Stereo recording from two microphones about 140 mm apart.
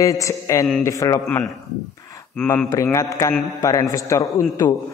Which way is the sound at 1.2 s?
5° left (ahead or behind).